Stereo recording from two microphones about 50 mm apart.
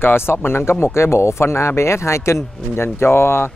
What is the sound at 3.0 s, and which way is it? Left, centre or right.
Speech, left.